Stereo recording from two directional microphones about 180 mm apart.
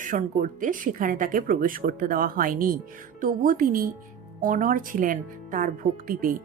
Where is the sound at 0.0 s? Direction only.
50° right (ahead or behind).